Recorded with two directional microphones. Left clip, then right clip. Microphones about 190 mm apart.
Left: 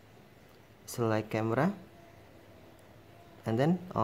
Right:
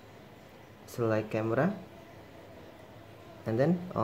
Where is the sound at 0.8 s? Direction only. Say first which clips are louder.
Right 1 dB; 25° left (ahead or behind).